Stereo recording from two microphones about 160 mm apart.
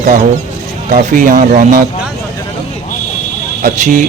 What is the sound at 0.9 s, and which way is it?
Speech, 55° right (ahead or behind).